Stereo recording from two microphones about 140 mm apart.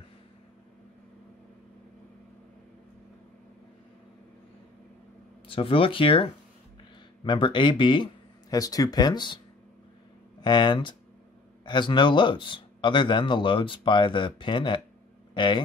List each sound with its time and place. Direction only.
5.5 s speech: 40° left (ahead or behind)
7.2 s speech: 35° left (ahead or behind)
10.4 s speech: 30° left (ahead or behind)